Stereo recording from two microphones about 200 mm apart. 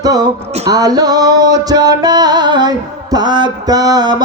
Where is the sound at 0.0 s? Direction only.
20° right (ahead or behind).